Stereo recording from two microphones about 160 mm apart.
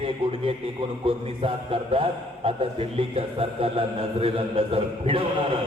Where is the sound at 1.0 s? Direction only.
35° right (ahead or behind).